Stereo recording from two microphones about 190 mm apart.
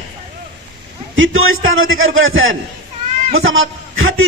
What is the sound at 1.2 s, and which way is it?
A man's voice, 90° right.